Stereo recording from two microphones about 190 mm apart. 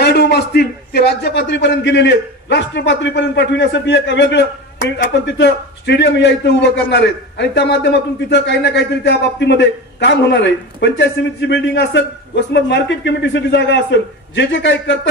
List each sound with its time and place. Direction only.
0.0 s a man's voice: 60° left (ahead or behind)